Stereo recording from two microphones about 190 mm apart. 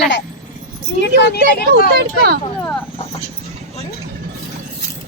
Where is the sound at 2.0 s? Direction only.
55° right (ahead or behind).